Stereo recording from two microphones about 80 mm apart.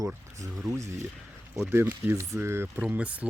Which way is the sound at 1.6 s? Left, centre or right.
Right.